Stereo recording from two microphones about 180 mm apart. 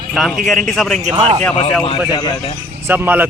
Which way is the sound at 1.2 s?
40° right (ahead or behind).